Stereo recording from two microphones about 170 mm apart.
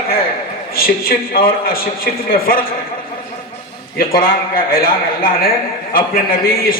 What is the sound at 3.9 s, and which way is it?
A man's voice, 60° left (ahead or behind).